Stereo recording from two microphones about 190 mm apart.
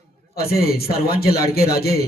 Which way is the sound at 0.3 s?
55° left (ahead or behind).